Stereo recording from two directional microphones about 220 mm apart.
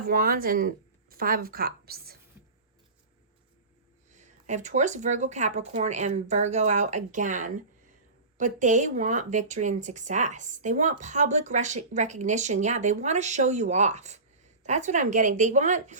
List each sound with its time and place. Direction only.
0.1 s a woman's voice: 40° right (ahead or behind)
4.1 s speech: 35° right (ahead or behind)